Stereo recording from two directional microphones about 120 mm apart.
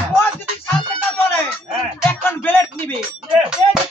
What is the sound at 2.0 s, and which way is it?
Music, 20° left (ahead or behind).